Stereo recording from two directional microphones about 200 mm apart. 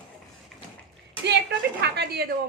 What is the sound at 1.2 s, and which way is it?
A woman's voice, 60° right (ahead or behind).